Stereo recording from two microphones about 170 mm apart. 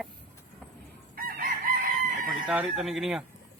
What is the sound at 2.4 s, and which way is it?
Speech, 5° right (ahead or behind).